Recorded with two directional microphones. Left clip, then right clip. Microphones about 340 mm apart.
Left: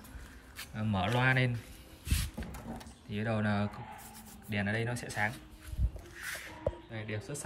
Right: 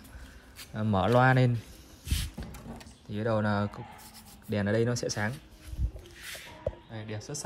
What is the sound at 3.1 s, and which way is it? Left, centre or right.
Speech, centre.